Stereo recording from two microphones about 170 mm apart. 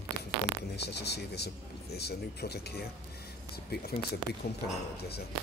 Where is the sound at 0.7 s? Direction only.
75° left (ahead or behind).